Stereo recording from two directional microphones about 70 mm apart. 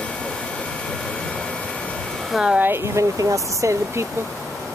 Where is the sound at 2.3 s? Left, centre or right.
Centre.